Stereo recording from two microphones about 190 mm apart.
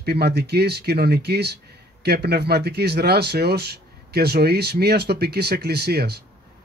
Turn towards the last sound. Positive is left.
turn(degrees=-60)  # may be behind; listen again after turning